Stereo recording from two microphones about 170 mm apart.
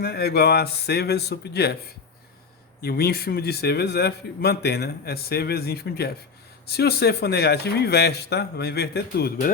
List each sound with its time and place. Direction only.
0.0 s a man's voice: 65° left (ahead or behind)
2.8 s a man's voice: 60° left (ahead or behind)